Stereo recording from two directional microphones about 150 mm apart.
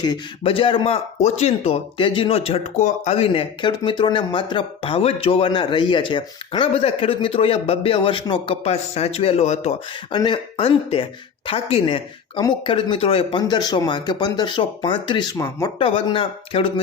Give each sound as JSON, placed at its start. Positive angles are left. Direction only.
{"t": 0.0, "sound": "speech", "side_deg": 35}
{"t": 2.7, "sound": "speech", "side_deg": 55}
{"t": 10.1, "sound": "speech", "side_deg": 30}
{"t": 15.8, "sound": "speech", "side_deg": 35}